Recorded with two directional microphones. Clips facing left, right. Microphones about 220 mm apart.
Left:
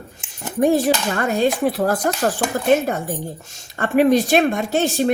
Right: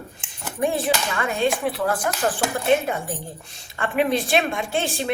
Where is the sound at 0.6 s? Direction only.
40° left (ahead or behind).